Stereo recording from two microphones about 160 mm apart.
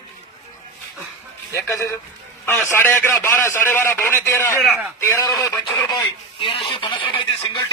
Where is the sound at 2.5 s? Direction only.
15° left (ahead or behind).